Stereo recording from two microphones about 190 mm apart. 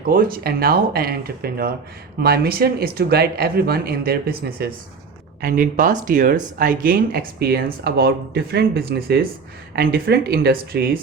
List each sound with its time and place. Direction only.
0.1 s speech: 50° right (ahead or behind)